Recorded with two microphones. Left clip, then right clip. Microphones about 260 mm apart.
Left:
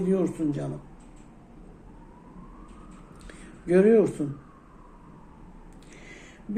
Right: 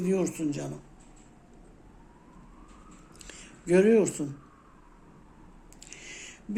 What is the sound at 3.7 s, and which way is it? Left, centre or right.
Speech, right.